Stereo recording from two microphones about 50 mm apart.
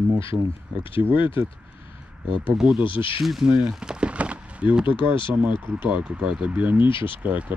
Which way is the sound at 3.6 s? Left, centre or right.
Centre.